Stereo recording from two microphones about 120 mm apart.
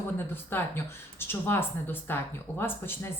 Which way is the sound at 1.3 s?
20° left (ahead or behind).